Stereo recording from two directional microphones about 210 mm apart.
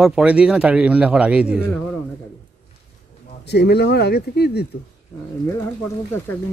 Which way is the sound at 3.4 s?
50° left (ahead or behind).